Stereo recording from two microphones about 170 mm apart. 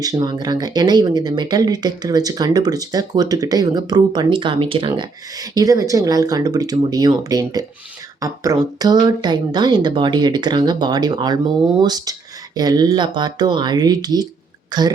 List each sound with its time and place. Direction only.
0.0 s speech: 25° right (ahead or behind)